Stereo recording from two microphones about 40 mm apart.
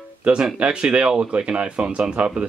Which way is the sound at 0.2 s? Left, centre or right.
Right.